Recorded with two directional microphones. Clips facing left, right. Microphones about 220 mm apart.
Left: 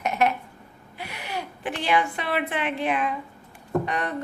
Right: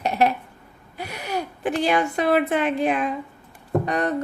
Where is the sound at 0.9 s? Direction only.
40° right (ahead or behind).